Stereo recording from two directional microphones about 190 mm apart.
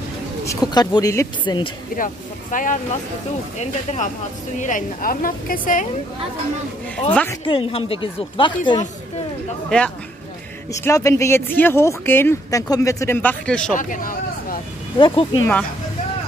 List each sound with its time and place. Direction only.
0.5 s speech: 20° left (ahead or behind)
2.5 s a woman's voice: 45° left (ahead or behind)
7.1 s speech: 10° left (ahead or behind)
7.4 s speech: 30° left (ahead or behind)
9.7 s speech: 5° left (ahead or behind)
10.7 s speech: 15° left (ahead or behind)
13.7 s speech: 45° left (ahead or behind)
15.0 s speech: 25° left (ahead or behind)